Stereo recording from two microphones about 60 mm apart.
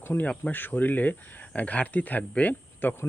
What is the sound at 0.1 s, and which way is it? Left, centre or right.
Speech, left.